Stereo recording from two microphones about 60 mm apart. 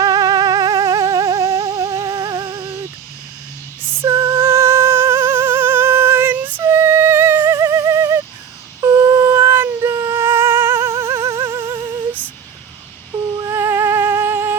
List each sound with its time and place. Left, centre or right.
0.0 s music: right
4.3 s humming: right
6.3 s music: right
6.6 s music: right
9.0 s a sound: right
9.9 s humming: right
11.5 s music: right
13.5 s music: right